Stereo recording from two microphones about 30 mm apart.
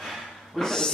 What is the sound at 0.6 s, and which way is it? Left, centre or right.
Speech, centre.